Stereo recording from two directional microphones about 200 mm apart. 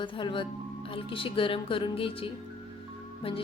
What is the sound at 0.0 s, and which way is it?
A woman's voice, 25° left (ahead or behind).